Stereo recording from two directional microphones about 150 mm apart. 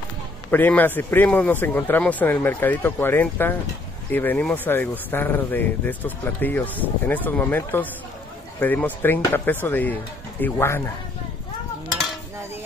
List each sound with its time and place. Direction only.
0.5 s speech: 10° left (ahead or behind)